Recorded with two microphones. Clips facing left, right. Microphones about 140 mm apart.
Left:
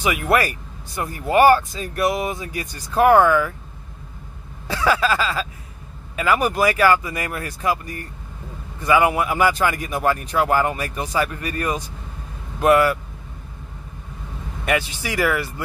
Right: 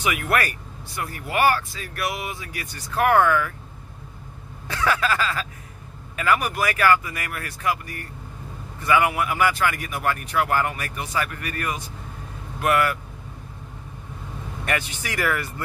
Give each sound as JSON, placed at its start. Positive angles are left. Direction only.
{"t": 0.0, "sound": "speech", "side_deg": 25}
{"t": 4.7, "sound": "speech", "side_deg": 20}
{"t": 14.6, "sound": "speech", "side_deg": 20}